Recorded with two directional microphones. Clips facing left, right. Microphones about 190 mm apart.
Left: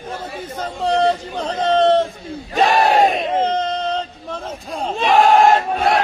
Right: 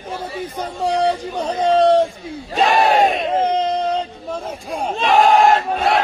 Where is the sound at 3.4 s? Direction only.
10° right (ahead or behind).